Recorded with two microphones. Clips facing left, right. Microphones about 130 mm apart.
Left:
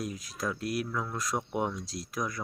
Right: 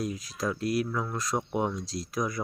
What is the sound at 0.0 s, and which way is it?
Speech, centre (ahead or behind).